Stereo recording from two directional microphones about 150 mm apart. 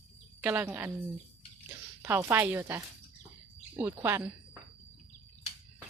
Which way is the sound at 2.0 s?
20° right (ahead or behind).